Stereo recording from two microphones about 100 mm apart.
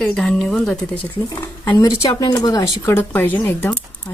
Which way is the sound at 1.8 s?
35° left (ahead or behind).